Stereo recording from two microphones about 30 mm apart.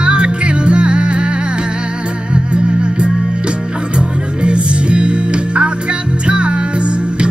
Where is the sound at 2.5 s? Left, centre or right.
Right.